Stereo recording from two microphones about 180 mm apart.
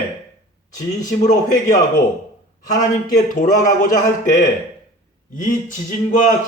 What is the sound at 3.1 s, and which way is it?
Speech, 45° left (ahead or behind).